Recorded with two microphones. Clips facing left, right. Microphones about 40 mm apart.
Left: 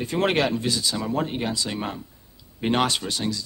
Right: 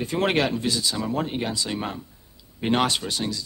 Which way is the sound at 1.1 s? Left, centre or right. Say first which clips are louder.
Left 1 dB; centre.